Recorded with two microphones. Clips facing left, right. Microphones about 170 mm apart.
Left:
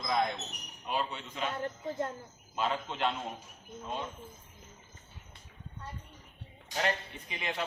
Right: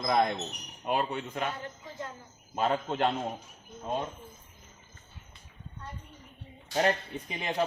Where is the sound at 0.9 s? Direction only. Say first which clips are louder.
Right 5 dB; 55° right (ahead or behind).